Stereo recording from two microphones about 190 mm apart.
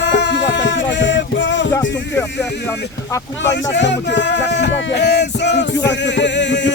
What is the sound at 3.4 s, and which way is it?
Speech, 70° left (ahead or behind).